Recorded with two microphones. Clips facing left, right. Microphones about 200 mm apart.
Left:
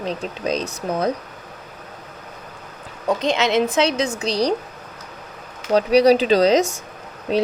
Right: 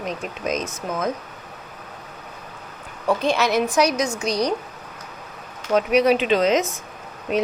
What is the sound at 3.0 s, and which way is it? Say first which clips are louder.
A woman's voice: even; 20° left (ahead or behind).